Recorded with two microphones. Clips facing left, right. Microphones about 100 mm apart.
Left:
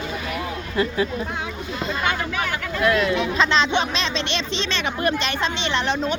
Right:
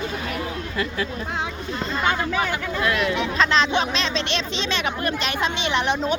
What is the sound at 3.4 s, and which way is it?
Speech, centre (ahead or behind).